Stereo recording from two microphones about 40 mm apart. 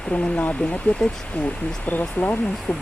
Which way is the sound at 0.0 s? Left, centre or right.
Left.